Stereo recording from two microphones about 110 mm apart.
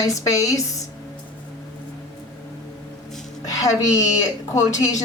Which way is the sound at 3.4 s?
30° left (ahead or behind).